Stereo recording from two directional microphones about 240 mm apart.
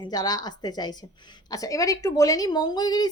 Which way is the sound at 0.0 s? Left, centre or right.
Centre.